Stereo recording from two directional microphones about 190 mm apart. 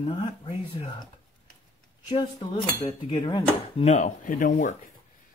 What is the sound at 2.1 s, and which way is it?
Cutlery, 25° left (ahead or behind).